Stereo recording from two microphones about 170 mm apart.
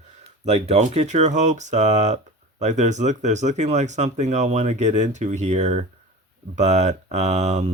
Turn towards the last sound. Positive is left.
turn(degrees=-40)  # may be behind; listen again after turning